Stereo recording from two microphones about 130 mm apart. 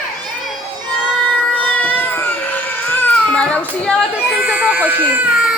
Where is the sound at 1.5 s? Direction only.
15° left (ahead or behind).